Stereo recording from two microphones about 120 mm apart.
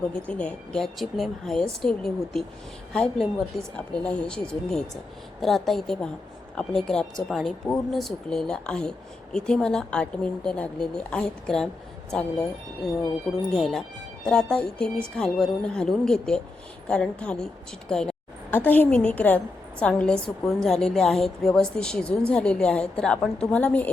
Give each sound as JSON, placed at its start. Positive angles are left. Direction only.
{"t": 0.1, "sound": "a woman's voice", "side_deg": 10}
{"t": 13.5, "sound": "a woman's voice", "side_deg": 5}